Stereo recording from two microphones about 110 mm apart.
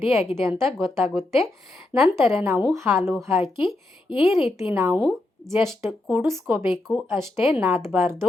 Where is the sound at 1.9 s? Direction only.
20° right (ahead or behind).